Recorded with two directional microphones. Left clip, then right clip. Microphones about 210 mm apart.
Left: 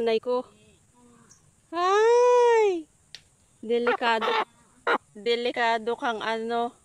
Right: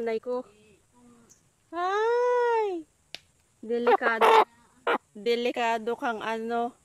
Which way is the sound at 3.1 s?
50° right (ahead or behind).